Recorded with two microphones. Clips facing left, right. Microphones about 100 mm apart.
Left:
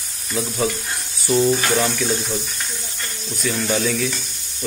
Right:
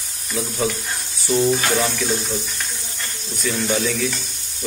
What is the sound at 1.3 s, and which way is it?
Speech, 5° left (ahead or behind).